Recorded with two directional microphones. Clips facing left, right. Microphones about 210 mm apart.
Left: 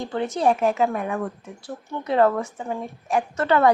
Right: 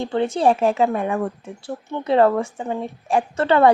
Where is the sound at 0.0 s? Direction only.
25° right (ahead or behind).